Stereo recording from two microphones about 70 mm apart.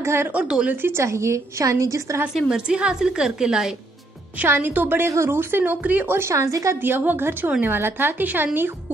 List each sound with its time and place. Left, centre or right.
0.0 s a woman's voice: right
1.0 s a woman's voice: right
2.5 s a woman's voice: centre
4.5 s a woman's voice: right
6.3 s a woman's voice: right
6.8 s a woman's voice: right